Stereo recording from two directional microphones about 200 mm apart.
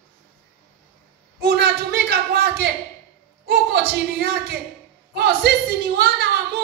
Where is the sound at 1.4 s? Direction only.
55° right (ahead or behind).